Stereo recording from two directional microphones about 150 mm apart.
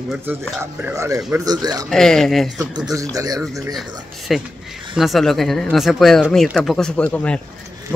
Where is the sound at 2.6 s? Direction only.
25° right (ahead or behind).